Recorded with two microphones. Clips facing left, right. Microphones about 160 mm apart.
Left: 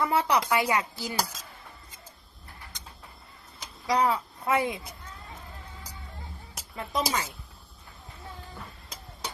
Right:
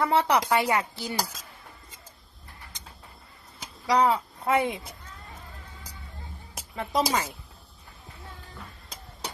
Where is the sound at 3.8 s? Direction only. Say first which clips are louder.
Right 3 dB; 30° right (ahead or behind).